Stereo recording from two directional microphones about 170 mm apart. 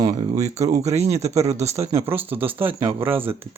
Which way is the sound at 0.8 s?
40° right (ahead or behind).